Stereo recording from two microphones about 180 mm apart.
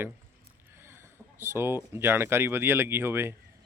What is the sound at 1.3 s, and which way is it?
Speech, 15° right (ahead or behind).